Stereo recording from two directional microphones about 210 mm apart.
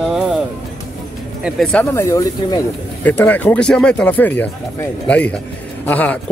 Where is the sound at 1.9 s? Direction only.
15° left (ahead or behind).